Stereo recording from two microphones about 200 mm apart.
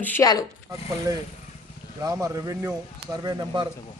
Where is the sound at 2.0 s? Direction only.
15° right (ahead or behind).